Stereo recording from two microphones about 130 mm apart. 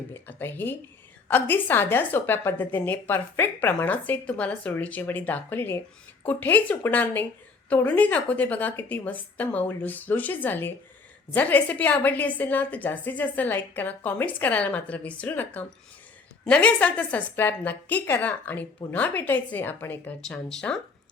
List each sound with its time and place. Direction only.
0.1 s a woman's voice: 15° left (ahead or behind)